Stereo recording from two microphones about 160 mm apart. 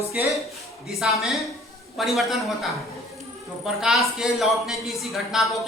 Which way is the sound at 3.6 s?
5° right (ahead or behind).